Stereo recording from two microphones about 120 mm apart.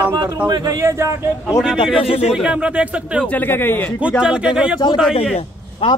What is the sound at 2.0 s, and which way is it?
Speech, 60° left (ahead or behind).